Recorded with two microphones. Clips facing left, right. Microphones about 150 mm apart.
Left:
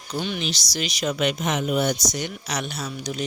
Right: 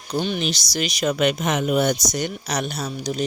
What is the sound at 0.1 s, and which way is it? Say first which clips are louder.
Speech: right 4 dB; 40° right (ahead or behind).